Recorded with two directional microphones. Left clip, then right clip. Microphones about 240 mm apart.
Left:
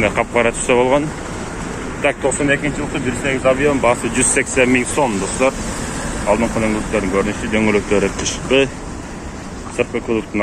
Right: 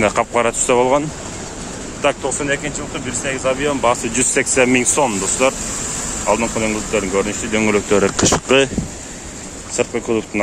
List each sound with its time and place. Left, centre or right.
0.0 s speech: right; by 3.7 s centre
3.8 s speech: centre
8.0 s speech: right
9.8 s speech: right